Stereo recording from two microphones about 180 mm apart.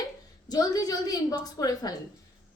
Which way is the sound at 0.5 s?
20° left (ahead or behind).